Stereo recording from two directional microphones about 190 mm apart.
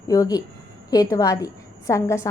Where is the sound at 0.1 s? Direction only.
20° left (ahead or behind).